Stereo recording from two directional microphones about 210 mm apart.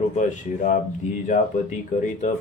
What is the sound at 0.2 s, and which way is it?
Speech, 35° left (ahead or behind).